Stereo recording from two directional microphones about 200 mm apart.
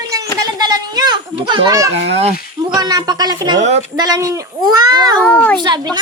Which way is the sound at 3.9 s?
20° right (ahead or behind).